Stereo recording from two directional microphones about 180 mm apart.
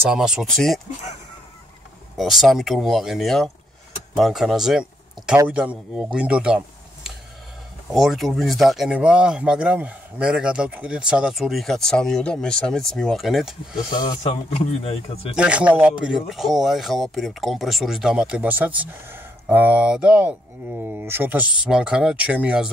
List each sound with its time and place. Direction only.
0.0 s speech: 5° right (ahead or behind)
2.1 s speech: centre (ahead or behind)
14.2 s a man's voice: 35° left (ahead or behind)
15.3 s speech: 5° right (ahead or behind)